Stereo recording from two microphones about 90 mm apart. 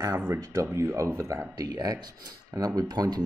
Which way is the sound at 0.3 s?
30° right (ahead or behind).